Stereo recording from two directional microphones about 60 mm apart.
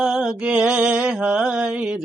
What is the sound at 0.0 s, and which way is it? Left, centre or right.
Mantra, centre.